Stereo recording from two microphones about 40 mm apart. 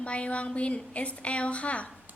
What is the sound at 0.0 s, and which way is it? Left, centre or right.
Speech, left.